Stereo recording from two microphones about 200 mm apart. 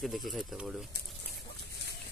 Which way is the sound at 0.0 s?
Centre (ahead or behind).